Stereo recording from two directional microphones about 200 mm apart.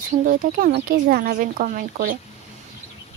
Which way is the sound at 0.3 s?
50° right (ahead or behind).